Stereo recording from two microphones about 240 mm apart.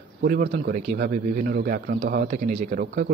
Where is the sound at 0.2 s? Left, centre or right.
Right.